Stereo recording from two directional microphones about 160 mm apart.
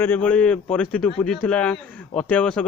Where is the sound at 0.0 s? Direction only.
10° left (ahead or behind).